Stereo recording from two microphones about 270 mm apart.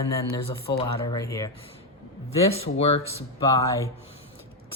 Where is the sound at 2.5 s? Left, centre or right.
Left.